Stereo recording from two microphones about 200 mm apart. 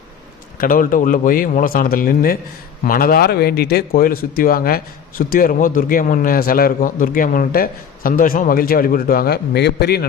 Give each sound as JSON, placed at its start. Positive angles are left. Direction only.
{"t": 0.6, "sound": "speech", "side_deg": 45}